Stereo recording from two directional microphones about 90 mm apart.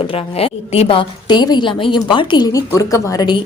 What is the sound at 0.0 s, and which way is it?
A woman's voice, 90° left.